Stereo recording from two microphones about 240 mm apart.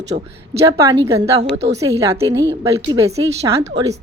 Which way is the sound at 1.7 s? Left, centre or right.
Centre.